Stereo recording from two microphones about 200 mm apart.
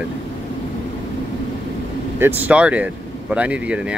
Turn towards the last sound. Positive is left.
turn(degrees=-5)  # may be behind; listen again after turning